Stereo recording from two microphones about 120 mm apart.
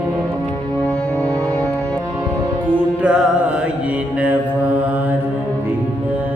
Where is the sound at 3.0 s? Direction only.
10° right (ahead or behind).